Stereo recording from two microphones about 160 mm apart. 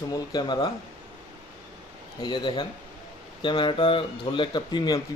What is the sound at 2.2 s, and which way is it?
Speech, 30° left (ahead or behind).